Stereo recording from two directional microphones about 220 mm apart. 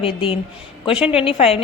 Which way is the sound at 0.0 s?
25° left (ahead or behind).